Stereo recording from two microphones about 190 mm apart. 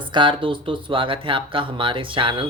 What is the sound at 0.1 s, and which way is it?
Speech, 25° right (ahead or behind).